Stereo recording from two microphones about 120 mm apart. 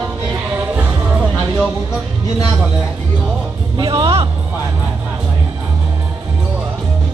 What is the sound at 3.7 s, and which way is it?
Music, 35° right (ahead or behind).